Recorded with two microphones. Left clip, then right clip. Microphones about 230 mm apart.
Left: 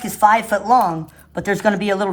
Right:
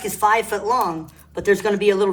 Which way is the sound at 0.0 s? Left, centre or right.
Left.